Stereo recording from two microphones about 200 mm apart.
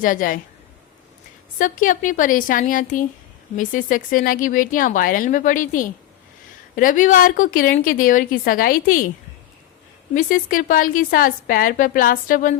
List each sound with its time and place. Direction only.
0.0 s a woman's voice: 45° left (ahead or behind)
1.5 s a woman's voice: 40° left (ahead or behind)
10.2 s a woman's voice: 45° left (ahead or behind)